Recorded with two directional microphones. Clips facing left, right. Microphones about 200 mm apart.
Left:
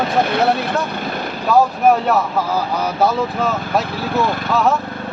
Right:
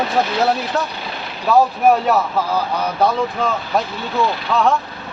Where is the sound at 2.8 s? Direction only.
5° left (ahead or behind).